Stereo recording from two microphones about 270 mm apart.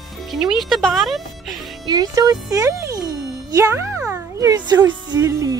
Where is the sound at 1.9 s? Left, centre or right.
Centre.